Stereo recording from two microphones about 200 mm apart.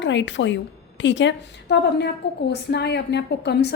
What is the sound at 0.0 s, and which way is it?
A woman's voice, 65° left (ahead or behind).